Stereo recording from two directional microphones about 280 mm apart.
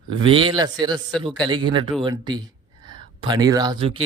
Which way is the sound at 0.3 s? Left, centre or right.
Centre.